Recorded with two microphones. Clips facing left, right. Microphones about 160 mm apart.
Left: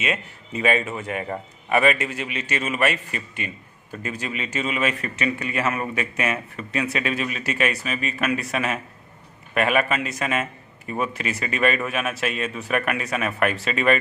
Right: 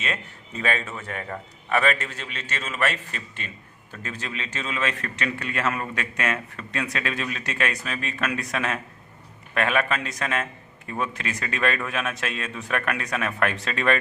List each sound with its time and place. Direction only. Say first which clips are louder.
0.0 s a man's voice: left 4 dB; 10° left (ahead or behind)